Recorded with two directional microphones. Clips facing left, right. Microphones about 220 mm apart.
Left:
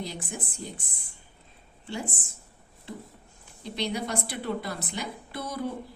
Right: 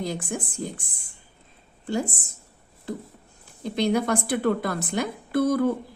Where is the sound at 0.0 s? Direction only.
50° right (ahead or behind).